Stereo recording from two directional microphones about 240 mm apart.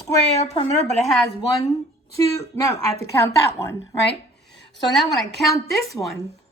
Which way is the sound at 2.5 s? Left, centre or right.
Centre.